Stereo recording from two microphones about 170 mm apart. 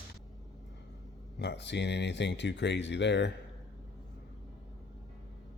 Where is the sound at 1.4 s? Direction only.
90° left.